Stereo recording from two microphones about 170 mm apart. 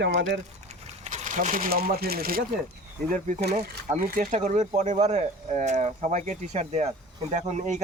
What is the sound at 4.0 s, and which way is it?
Speech, 60° right (ahead or behind).